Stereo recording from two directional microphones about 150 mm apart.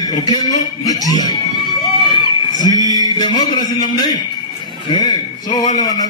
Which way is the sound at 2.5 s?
25° left (ahead or behind).